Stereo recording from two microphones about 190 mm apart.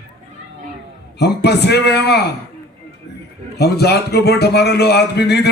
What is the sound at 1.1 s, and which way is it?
A man's voice, 60° left (ahead or behind).